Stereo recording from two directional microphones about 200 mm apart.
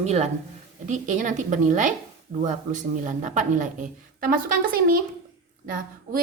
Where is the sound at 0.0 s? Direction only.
35° right (ahead or behind).